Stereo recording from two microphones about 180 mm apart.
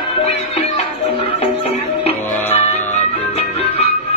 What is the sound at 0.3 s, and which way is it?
Music, 35° left (ahead or behind).